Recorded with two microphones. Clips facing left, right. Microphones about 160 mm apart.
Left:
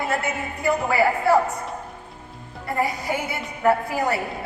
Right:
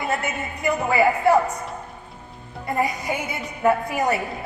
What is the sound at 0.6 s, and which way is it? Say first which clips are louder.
Speech: right 1 dB; 20° right (ahead or behind).